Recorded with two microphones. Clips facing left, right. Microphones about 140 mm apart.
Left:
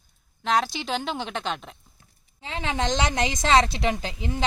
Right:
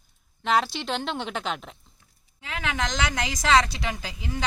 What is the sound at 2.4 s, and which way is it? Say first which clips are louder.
Speech: left 2 dB; 30° left (ahead or behind).